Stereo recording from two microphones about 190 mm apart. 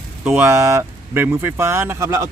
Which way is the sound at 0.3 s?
10° right (ahead or behind).